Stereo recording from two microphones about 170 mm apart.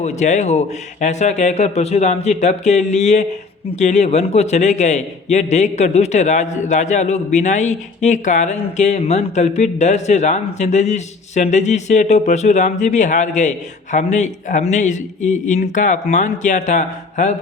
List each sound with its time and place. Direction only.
0.0 s a man's voice: 40° left (ahead or behind)